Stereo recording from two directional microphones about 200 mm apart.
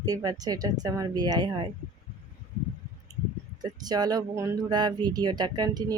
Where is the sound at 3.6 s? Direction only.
20° right (ahead or behind).